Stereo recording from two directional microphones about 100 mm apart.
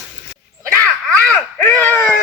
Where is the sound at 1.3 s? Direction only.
20° left (ahead or behind).